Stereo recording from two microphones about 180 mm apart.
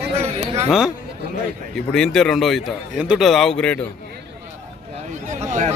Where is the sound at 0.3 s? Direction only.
35° right (ahead or behind).